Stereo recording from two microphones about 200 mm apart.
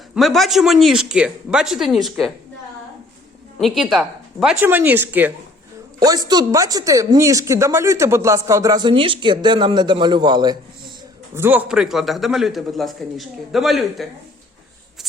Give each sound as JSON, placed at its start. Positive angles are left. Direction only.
{"t": 0.1, "sound": "a man's voice", "side_deg": 0}
{"t": 3.6, "sound": "speech", "side_deg": 0}
{"t": 11.3, "sound": "a man's voice", "side_deg": -10}